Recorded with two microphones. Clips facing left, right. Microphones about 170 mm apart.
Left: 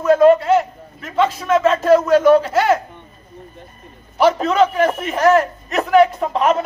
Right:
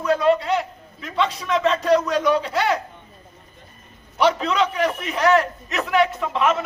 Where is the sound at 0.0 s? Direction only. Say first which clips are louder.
Left 7 dB; 50° left (ahead or behind).